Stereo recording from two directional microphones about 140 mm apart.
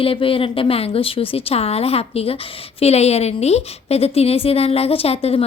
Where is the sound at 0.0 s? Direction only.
40° left (ahead or behind).